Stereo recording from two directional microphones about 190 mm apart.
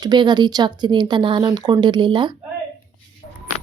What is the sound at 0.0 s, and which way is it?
Speech, 25° right (ahead or behind).